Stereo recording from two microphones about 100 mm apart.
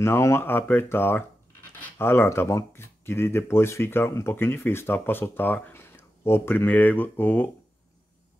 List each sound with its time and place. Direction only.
0.0 s speech: 25° left (ahead or behind)